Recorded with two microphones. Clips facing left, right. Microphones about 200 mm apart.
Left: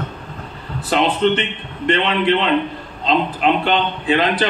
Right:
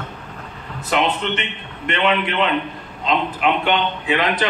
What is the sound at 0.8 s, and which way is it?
A man's voice, 35° left (ahead or behind).